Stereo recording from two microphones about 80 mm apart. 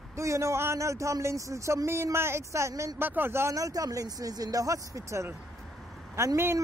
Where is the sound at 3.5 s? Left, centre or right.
Right.